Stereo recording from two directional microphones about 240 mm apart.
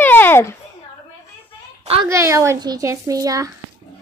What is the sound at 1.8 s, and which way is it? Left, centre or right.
Speech, right.